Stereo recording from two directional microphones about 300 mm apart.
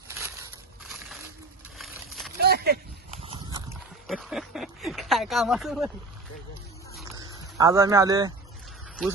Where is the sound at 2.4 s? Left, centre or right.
Right.